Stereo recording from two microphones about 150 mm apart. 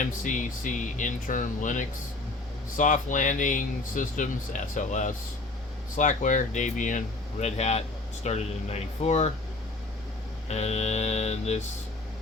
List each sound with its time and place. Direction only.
0.0 s speech: 60° left (ahead or behind)
10.5 s speech: 45° left (ahead or behind)